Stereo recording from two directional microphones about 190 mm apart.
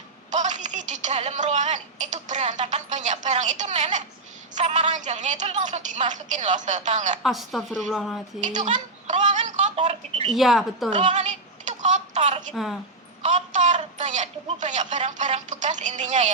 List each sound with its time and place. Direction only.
0.3 s a woman's voice: 40° right (ahead or behind)
7.2 s speech: centre (ahead or behind)
8.4 s a child's voice: 40° right (ahead or behind)
9.4 s a sound: 30° right (ahead or behind)
10.3 s speech: centre (ahead or behind)
10.9 s a sound: 35° right (ahead or behind)
13.2 s a woman's voice: 35° right (ahead or behind)